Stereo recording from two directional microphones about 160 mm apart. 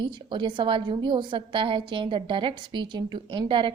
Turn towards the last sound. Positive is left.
turn(degrees=-30)  # may be behind; listen again after turning